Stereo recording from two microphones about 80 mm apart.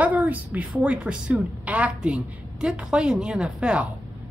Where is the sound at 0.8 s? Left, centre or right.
Centre.